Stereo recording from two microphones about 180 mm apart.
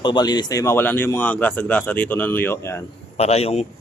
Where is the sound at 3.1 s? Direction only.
35° left (ahead or behind).